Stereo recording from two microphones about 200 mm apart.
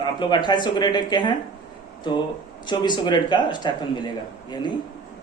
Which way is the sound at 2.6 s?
20° left (ahead or behind).